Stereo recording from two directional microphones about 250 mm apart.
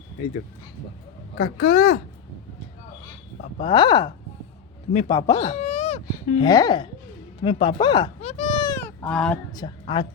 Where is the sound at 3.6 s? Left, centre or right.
Centre.